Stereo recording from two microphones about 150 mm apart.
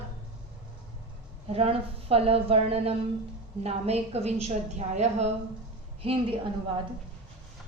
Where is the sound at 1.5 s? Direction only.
40° right (ahead or behind).